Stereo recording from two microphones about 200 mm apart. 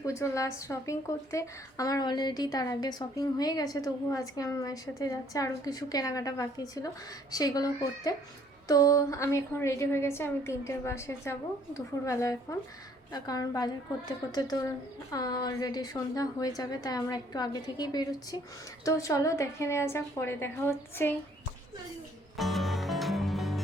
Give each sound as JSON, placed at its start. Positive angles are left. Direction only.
{"t": 0.0, "sound": "a woman's voice", "side_deg": 15}
{"t": 22.4, "sound": "music", "side_deg": 0}